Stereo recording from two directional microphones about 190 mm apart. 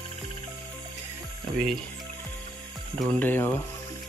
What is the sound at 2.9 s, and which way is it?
Speech, 10° left (ahead or behind).